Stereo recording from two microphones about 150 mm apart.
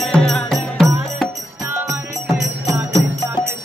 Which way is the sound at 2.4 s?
20° right (ahead or behind).